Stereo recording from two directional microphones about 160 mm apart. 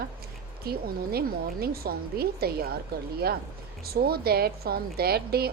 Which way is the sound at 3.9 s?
75° right (ahead or behind).